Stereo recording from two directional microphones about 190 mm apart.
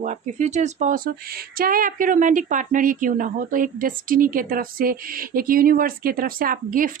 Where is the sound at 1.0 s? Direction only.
50° right (ahead or behind).